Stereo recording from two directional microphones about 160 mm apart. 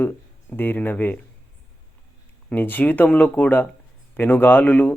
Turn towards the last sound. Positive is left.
turn(degrees=10)  # may be behind; listen again after turning